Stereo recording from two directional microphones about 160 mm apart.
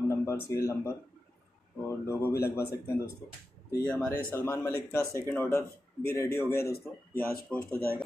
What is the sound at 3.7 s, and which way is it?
A man's voice, 10° left (ahead or behind).